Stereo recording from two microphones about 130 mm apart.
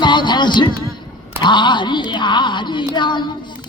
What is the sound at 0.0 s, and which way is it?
Music, 35° left (ahead or behind).